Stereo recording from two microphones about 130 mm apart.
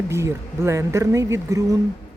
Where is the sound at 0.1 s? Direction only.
20° right (ahead or behind).